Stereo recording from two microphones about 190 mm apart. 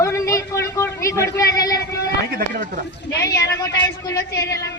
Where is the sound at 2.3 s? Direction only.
50° right (ahead or behind).